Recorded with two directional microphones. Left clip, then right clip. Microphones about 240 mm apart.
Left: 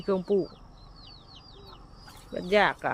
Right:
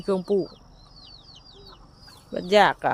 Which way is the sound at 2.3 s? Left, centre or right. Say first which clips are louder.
Right 5 dB; centre.